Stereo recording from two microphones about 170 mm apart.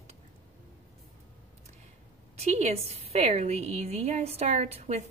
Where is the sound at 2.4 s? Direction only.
40° right (ahead or behind).